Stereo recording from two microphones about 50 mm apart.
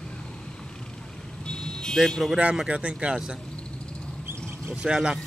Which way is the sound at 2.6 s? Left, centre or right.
Right.